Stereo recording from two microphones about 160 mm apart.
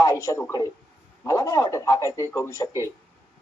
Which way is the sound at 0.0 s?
20° left (ahead or behind).